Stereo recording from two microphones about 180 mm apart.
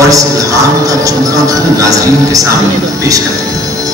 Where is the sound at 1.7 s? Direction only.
20° right (ahead or behind).